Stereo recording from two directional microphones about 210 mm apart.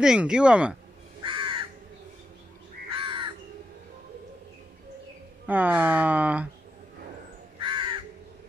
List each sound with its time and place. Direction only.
0.0 s speech: 5° right (ahead or behind)
1.2 s crow: 25° right (ahead or behind)
3.0 s crow: 25° right (ahead or behind)
5.5 s speech: 10° right (ahead or behind)
7.6 s crow: 20° right (ahead or behind)